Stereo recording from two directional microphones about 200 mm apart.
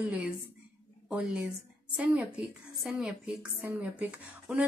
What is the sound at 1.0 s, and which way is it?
Speech, 5° right (ahead or behind).